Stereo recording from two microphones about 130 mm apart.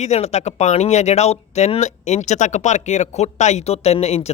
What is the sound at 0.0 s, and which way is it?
Speech, 60° left (ahead or behind).